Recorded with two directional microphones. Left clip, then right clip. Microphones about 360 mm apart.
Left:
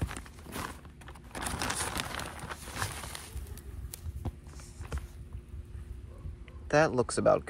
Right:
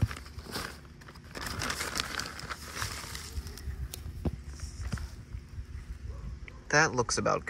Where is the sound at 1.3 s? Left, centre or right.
Left.